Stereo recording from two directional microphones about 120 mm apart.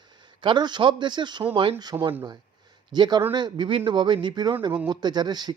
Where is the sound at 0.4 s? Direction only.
40° right (ahead or behind).